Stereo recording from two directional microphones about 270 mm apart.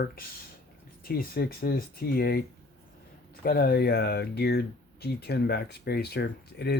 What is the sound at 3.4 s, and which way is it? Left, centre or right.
Speech, left.